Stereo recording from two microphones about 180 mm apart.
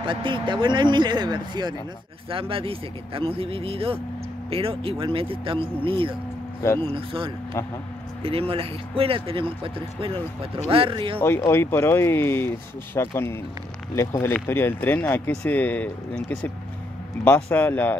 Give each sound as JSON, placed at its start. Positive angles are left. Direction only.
{"t": 0.0, "sound": "speech", "side_deg": -25}
{"t": 11.1, "sound": "speech", "side_deg": 15}